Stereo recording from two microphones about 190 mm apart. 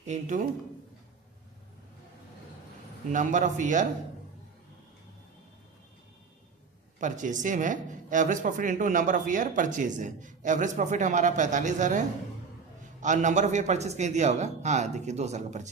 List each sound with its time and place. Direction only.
0.0 s speech: 40° right (ahead or behind)
3.1 s speech: 40° right (ahead or behind)
7.0 s speech: 40° right (ahead or behind)